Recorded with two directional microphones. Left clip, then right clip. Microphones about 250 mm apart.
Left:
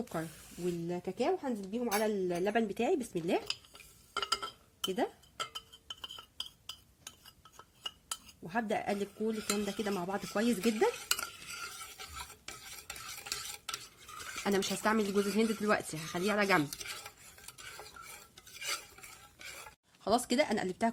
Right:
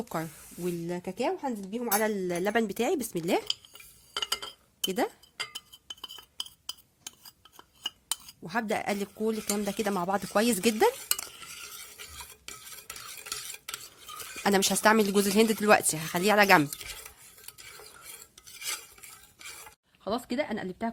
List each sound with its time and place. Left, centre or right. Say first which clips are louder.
0.0 s speech: right 5 dB; right
4.1 s a sound: right 2 dB; centre
4.9 s speech: right 5 dB; right
8.4 s speech: right 4 dB; right
11.1 s stir: right 1 dB; centre
14.4 s speech: right 9 dB; right
18.3 s stir: right 1 dB; centre
20.1 s speech: left 1 dB; right